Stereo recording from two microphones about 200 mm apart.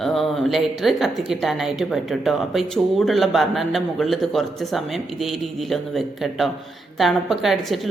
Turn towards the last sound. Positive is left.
turn(degrees=0)  # may be behind; listen again after turning